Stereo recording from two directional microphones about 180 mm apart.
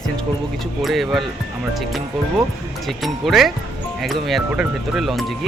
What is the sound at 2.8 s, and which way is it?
Speech, centre (ahead or behind).